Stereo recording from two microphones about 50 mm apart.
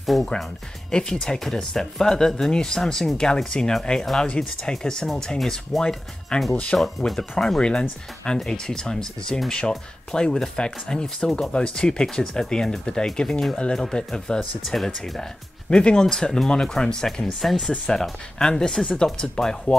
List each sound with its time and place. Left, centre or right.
0.0 s speech: centre
4.0 s speech: centre
5.8 s speech: centre
6.5 s speech: left
14.6 s speech: centre
15.7 s speech: centre